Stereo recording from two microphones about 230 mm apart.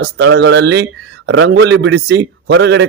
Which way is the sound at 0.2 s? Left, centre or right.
Right.